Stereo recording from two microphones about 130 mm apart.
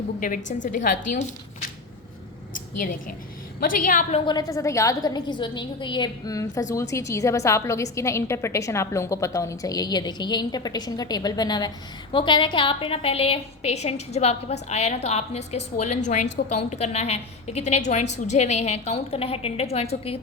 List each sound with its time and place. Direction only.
0.2 s a woman's voice: 85° left
3.7 s a woman's voice: 90° left
4.3 s a woman's voice: 30° left (ahead or behind); by 20.1 s 50° left (ahead or behind)